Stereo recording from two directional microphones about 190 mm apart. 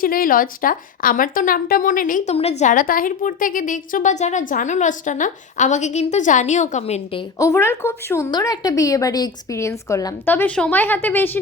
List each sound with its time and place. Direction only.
0.0 s speech: 50° left (ahead or behind); by 7.3 s 30° left (ahead or behind)
7.3 s speech: 15° left (ahead or behind)